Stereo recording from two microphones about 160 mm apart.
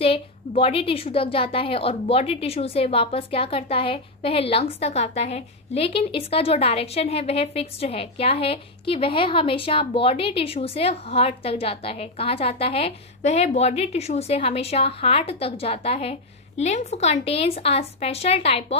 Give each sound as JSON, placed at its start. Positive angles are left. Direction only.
{"t": 0.6, "sound": "speech", "side_deg": 35}